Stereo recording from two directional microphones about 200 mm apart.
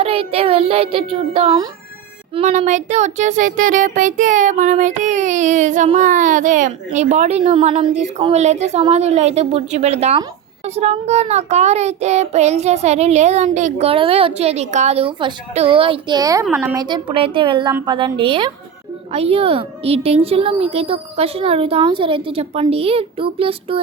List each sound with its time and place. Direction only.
0.0 s a woman's voice: 30° right (ahead or behind)
2.3 s child singing: 35° right (ahead or behind); by 16.8 s 10° right (ahead or behind)
16.8 s a woman's voice: 25° right (ahead or behind)